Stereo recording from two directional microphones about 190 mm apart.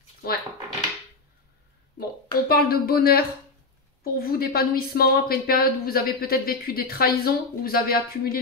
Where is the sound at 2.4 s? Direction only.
50° left (ahead or behind).